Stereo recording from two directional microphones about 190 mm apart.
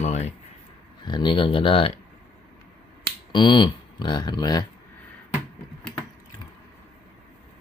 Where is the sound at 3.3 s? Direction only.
25° left (ahead or behind).